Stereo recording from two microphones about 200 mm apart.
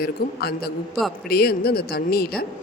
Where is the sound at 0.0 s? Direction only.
50° left (ahead or behind).